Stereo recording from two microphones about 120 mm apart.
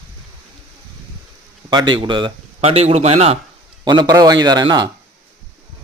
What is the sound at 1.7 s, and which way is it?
Speech, 40° right (ahead or behind).